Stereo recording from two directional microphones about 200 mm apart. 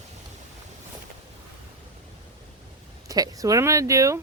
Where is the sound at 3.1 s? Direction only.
15° right (ahead or behind).